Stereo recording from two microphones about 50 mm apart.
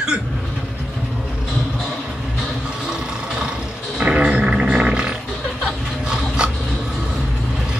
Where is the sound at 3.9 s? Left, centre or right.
Right.